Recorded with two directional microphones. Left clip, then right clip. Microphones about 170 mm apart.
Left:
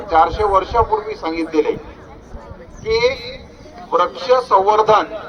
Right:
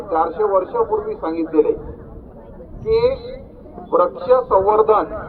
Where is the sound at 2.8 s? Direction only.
25° left (ahead or behind).